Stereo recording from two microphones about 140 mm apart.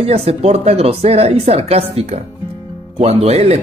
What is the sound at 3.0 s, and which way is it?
Speech, 50° right (ahead or behind).